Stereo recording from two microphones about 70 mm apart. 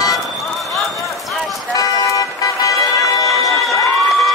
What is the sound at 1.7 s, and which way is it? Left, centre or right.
Music, left.